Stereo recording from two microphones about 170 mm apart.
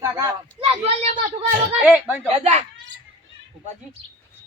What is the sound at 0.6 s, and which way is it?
Speech, 35° right (ahead or behind).